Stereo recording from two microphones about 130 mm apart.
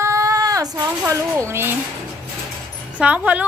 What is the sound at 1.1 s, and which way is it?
Speech, 20° right (ahead or behind).